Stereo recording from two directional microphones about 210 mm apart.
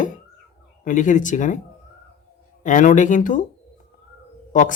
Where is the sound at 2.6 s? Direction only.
35° left (ahead or behind).